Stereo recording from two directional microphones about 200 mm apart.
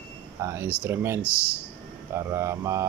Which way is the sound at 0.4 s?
15° right (ahead or behind).